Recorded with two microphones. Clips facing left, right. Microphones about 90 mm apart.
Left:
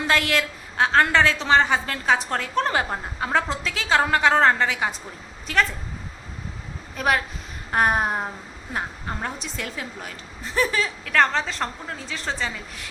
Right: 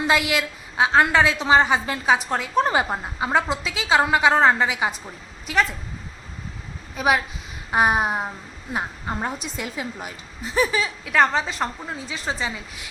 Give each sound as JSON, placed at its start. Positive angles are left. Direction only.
{"t": 0.1, "sound": "a woman's voice", "side_deg": -10}
{"t": 6.9, "sound": "a woman's voice", "side_deg": -10}